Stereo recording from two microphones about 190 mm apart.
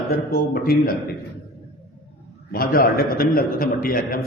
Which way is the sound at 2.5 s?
50° left (ahead or behind).